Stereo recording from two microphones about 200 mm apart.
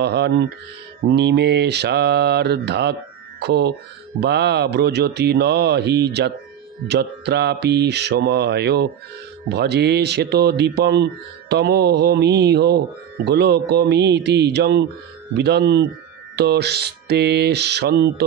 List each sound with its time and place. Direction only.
0.0 s speech: 55° right (ahead or behind)